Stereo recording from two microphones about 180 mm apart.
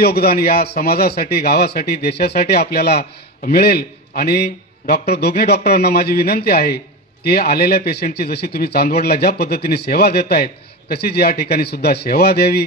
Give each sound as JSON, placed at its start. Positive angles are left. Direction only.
{"t": 0.0, "sound": "speech", "side_deg": 60}